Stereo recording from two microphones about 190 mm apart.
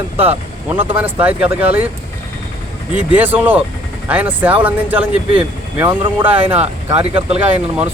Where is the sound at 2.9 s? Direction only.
5° right (ahead or behind).